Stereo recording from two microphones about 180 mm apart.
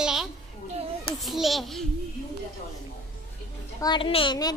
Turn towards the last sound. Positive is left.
turn(degrees=25)  # may be behind; listen again after turning